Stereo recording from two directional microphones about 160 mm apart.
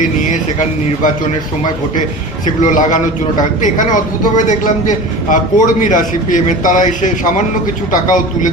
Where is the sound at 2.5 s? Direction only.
50° left (ahead or behind).